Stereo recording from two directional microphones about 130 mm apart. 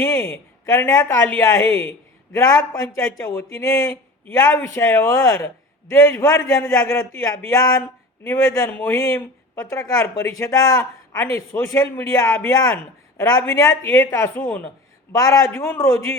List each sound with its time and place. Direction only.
0.0 s a woman's voice: 20° left (ahead or behind)
15.1 s speech: 25° left (ahead or behind)